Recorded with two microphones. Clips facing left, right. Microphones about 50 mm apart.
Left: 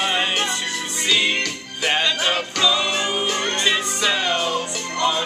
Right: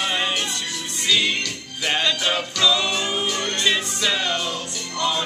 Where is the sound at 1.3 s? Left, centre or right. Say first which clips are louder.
Left 3 dB; left.